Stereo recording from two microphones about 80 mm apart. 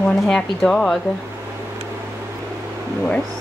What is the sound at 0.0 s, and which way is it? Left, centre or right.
Speech, centre.